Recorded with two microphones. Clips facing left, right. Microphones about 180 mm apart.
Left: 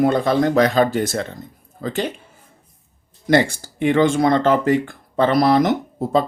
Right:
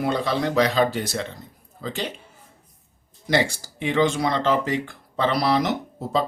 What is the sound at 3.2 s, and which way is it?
Speech, 50° left (ahead or behind).